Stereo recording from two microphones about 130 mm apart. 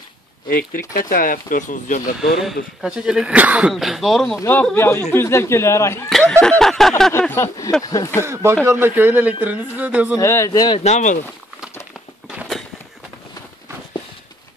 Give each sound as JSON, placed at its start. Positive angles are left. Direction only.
{"t": 0.5, "sound": "speech", "side_deg": 90}
{"t": 2.1, "sound": "speech", "side_deg": -5}
{"t": 4.4, "sound": "speech", "side_deg": 15}
{"t": 6.0, "sound": "a sound", "side_deg": 5}
{"t": 7.1, "sound": "speech", "side_deg": 15}
{"t": 8.2, "sound": "speech", "side_deg": -20}
{"t": 10.1, "sound": "speech", "side_deg": 25}
{"t": 10.8, "sound": "speech", "side_deg": 65}